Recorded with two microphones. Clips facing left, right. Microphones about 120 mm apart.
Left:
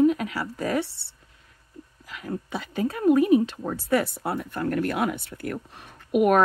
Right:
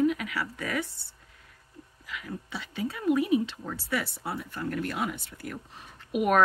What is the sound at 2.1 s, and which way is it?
Speech, 40° left (ahead or behind).